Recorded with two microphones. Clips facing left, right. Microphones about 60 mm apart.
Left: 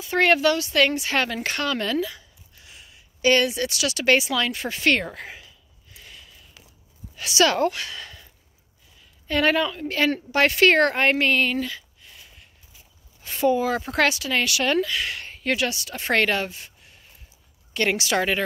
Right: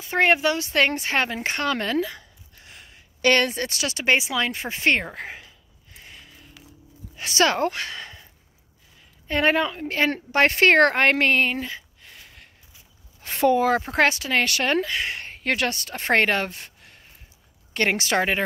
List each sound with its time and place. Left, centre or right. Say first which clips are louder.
0.0 s speech: left 1 dB; right
0.7 s a woman's voice: left 1 dB; right
1.7 s a sound: right 1 dB; right
7.2 s speech: left 1 dB; right
9.3 s a woman's voice: even; right
12.0 s a sound: right 2 dB; right
13.2 s speech: right 2 dB; right
17.7 s a woman's voice: right 1 dB; right